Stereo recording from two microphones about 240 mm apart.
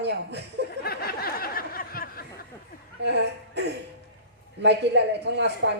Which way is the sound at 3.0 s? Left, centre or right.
Right.